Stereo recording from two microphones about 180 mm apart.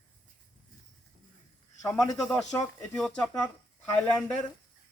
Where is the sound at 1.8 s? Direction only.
20° left (ahead or behind).